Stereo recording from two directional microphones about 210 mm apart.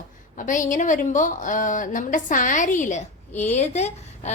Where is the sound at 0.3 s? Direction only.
40° left (ahead or behind).